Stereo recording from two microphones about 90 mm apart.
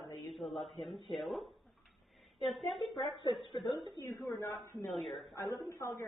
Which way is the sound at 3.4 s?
65° left (ahead or behind).